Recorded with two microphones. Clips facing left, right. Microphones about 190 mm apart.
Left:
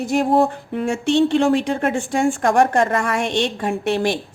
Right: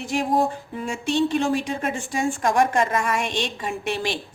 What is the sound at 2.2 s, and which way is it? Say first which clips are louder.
A woman's voice: left 4 dB; 55° left (ahead or behind).